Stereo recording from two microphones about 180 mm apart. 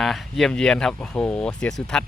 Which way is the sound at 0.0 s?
Centre (ahead or behind).